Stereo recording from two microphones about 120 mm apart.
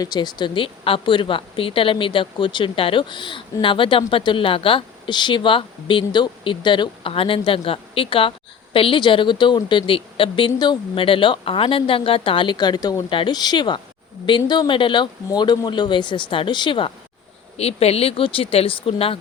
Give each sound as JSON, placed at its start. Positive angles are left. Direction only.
{"t": 0.0, "sound": "a woman's voice", "side_deg": 35}
{"t": 13.1, "sound": "speech", "side_deg": 40}
{"t": 17.6, "sound": "a woman's voice", "side_deg": 60}